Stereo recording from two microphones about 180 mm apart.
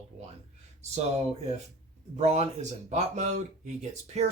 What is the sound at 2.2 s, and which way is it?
Speech, 35° right (ahead or behind).